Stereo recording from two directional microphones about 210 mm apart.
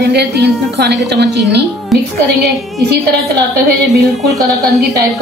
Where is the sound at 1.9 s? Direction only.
Centre (ahead or behind).